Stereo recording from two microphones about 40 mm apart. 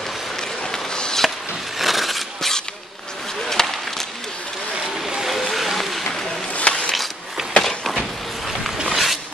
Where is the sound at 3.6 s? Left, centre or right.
Centre.